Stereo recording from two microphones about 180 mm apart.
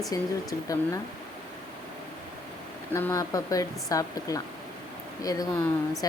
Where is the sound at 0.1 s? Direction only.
20° left (ahead or behind).